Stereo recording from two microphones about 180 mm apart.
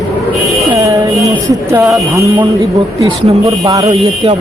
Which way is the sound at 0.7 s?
20° right (ahead or behind).